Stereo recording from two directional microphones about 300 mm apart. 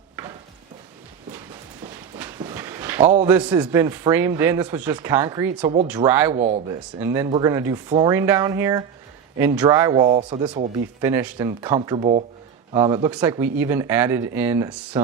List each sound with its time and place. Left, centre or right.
1.8 s a sound: centre
3.2 s speech: centre
6.3 s speech: right
7.0 s speech: centre